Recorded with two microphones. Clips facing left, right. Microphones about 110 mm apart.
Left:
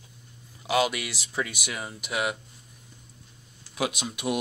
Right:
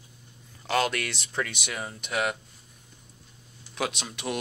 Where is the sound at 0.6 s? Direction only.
10° left (ahead or behind).